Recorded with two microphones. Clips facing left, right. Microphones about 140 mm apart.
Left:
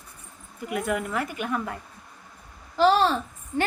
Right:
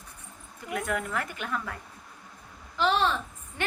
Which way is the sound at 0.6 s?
10° left (ahead or behind).